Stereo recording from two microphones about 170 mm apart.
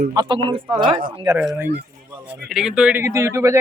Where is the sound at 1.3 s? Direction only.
10° right (ahead or behind).